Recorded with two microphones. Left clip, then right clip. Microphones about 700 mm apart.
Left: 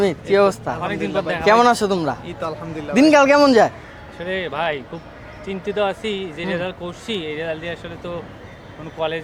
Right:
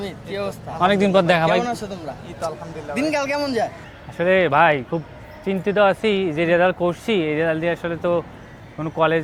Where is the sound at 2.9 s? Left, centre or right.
Left.